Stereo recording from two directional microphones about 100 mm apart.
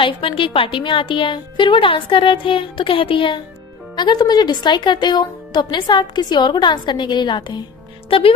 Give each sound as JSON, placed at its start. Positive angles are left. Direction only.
{"t": 0.0, "sound": "a woman's voice", "side_deg": 60}
{"t": 8.1, "sound": "music", "side_deg": 65}